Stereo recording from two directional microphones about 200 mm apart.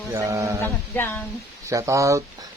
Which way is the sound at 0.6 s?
10° left (ahead or behind).